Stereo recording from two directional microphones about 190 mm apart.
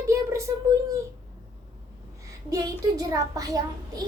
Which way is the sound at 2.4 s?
20° right (ahead or behind).